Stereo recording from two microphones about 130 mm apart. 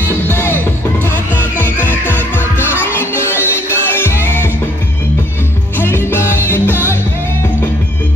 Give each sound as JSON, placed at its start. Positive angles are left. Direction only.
{"t": 0.1, "sound": "music", "side_deg": 15}
{"t": 2.1, "sound": "music", "side_deg": -15}
{"t": 3.3, "sound": "music", "side_deg": 20}
{"t": 5.8, "sound": "music", "side_deg": 15}